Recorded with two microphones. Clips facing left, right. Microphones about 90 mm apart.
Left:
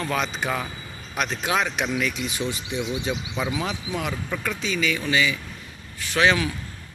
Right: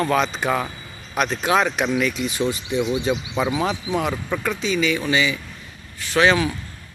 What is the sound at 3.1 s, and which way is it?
Speech, 90° right.